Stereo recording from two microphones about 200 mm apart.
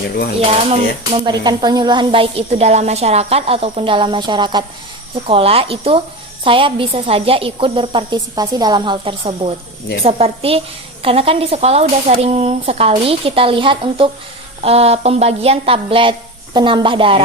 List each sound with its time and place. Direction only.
1.1 s speech: 25° right (ahead or behind)
14.6 s a sound: 30° right (ahead or behind)
16.6 s speech: 25° right (ahead or behind)